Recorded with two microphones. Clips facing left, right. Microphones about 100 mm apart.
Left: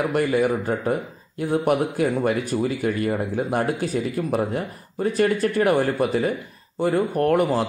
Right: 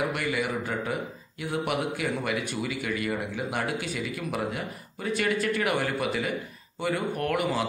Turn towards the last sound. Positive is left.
turn(degrees=40)  # may be behind; listen again after turning